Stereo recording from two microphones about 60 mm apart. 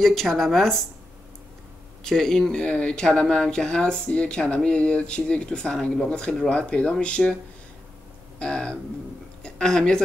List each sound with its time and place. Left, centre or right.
0.0 s speech: centre
2.0 s speech: centre
8.4 s a woman's voice: centre